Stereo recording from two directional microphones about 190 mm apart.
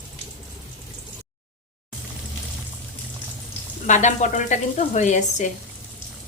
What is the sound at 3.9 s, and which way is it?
Speech, 40° left (ahead or behind).